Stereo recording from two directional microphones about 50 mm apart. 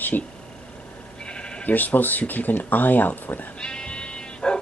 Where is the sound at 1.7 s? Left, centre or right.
Left.